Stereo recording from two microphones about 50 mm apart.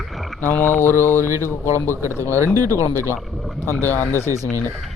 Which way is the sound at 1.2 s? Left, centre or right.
Right.